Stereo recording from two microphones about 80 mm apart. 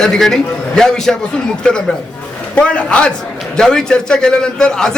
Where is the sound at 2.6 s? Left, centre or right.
Centre.